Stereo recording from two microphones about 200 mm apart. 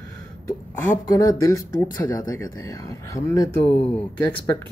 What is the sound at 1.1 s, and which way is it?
Speech, 15° left (ahead or behind).